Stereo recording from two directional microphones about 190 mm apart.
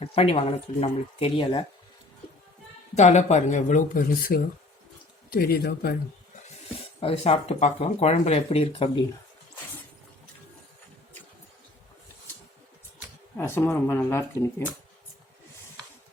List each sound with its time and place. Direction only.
0.0 s speech: 30° left (ahead or behind)
2.9 s a man's voice: 40° left (ahead or behind); by 6.0 s 55° left (ahead or behind)
7.0 s speech: 30° left (ahead or behind)
13.3 s speech: 10° left (ahead or behind)